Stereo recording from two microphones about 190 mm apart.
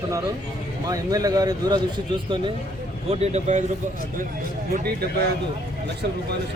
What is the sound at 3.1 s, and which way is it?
Speech, 35° right (ahead or behind).